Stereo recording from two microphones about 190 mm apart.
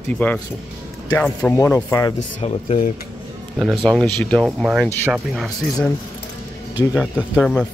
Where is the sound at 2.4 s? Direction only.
30° left (ahead or behind).